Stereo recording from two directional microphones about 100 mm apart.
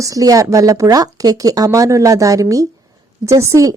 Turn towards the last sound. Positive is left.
turn(degrees=-30)  # may be behind; listen again after turning